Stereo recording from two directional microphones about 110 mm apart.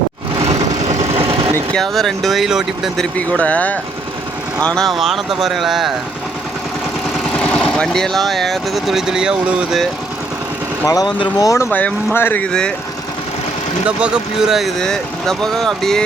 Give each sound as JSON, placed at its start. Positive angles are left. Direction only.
{"t": 0.9, "sound": "vehicle", "side_deg": -80}
{"t": 1.7, "sound": "speech", "side_deg": 0}
{"t": 3.2, "sound": "speech", "side_deg": 10}
{"t": 7.3, "sound": "speech", "side_deg": 5}
{"t": 10.8, "sound": "speech", "side_deg": 35}
{"t": 11.7, "sound": "speech", "side_deg": 15}
{"t": 13.8, "sound": "speech", "side_deg": -5}